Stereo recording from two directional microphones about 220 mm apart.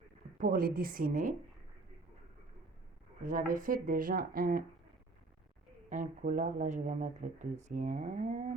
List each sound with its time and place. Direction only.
0.3 s speech: 40° right (ahead or behind)
3.2 s speech: 40° right (ahead or behind)
5.9 s speech: 35° right (ahead or behind)